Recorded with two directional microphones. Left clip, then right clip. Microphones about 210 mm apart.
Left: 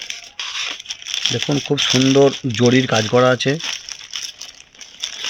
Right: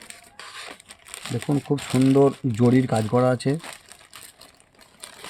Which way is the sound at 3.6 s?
50° right (ahead or behind).